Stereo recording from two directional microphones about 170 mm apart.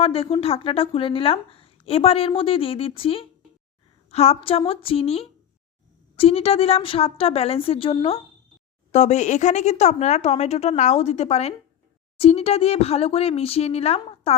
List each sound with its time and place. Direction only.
0.0 s a woman's voice: 35° left (ahead or behind)